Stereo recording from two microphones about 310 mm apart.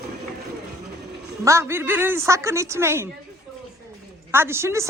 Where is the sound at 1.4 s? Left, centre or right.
Centre.